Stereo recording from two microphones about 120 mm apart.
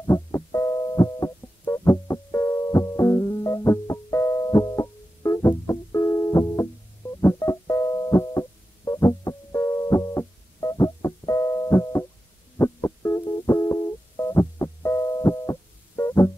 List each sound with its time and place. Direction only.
0.0 s music: 30° left (ahead or behind)